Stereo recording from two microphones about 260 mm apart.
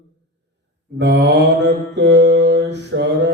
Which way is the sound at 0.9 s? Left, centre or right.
Right.